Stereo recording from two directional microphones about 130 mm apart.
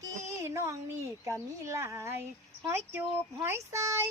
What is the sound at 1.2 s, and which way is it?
Speech, 25° right (ahead or behind).